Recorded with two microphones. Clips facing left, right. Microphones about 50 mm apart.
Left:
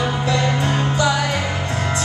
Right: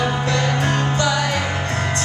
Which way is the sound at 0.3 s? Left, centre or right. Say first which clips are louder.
Even; centre.